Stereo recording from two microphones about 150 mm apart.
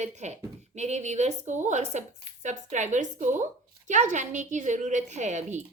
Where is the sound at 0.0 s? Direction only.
50° right (ahead or behind).